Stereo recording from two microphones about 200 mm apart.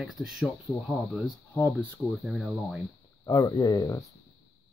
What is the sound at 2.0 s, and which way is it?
Speech, centre (ahead or behind).